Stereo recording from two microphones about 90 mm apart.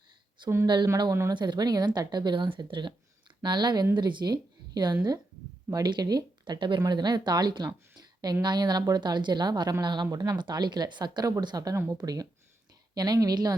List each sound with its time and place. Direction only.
0.4 s a woman's voice: 55° right (ahead or behind)
6.4 s speech: 60° right (ahead or behind); by 13.6 s 45° right (ahead or behind)